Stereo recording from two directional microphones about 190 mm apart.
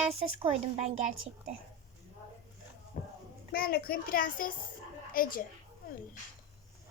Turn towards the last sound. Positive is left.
turn(degrees=50)  # may be behind; listen again after turning